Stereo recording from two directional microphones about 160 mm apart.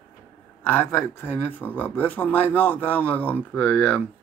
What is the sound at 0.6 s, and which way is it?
Speech, 15° left (ahead or behind).